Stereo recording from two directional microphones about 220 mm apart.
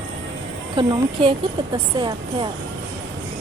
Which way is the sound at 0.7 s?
20° right (ahead or behind).